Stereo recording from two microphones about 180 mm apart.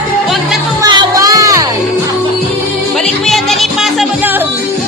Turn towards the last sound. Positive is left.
turn(degrees=0)  # may be behind; listen again after turning